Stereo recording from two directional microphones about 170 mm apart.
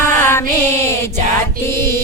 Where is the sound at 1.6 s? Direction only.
15° left (ahead or behind).